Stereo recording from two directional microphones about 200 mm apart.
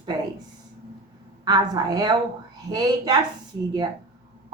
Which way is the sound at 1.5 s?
20° right (ahead or behind).